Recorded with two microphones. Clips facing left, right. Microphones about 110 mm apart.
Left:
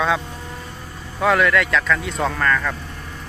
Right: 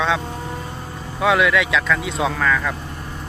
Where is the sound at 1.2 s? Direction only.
5° right (ahead or behind).